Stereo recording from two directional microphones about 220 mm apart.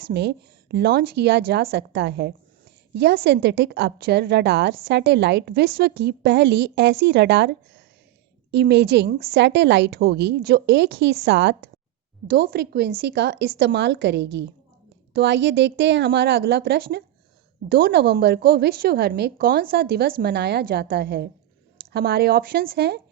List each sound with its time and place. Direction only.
0.0 s a woman's voice: 50° right (ahead or behind)